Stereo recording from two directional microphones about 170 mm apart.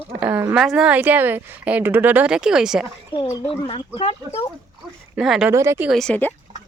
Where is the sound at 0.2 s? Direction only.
5° right (ahead or behind).